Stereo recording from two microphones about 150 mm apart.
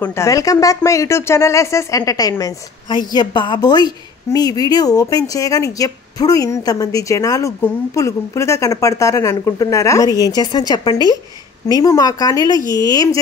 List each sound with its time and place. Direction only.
0.0 s speech: 20° left (ahead or behind)